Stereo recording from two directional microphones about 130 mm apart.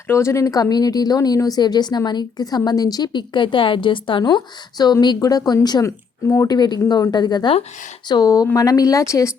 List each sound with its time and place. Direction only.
0.1 s speech: 20° left (ahead or behind)